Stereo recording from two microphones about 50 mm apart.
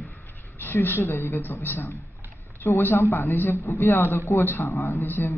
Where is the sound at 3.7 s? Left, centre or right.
Left.